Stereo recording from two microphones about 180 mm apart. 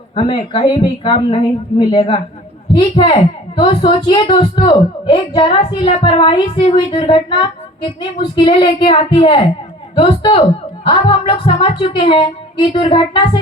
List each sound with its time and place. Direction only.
0.2 s a woman's voice: 30° left (ahead or behind)